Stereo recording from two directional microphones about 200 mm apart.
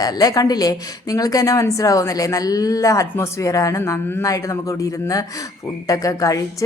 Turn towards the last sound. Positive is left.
turn(degrees=15)  # may be behind; listen again after turning